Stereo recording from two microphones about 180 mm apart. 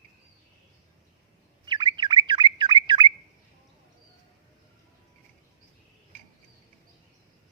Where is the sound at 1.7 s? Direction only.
25° right (ahead or behind).